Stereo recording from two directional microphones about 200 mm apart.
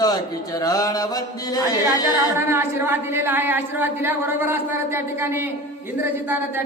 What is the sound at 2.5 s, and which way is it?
A woman's voice, 10° right (ahead or behind).